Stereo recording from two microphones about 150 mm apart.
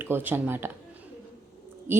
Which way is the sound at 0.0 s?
15° right (ahead or behind).